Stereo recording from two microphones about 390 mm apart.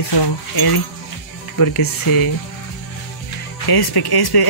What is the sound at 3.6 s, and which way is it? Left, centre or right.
Speech, left.